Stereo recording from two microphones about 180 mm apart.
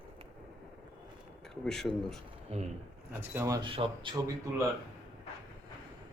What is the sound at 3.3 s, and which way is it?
Speech, 15° right (ahead or behind).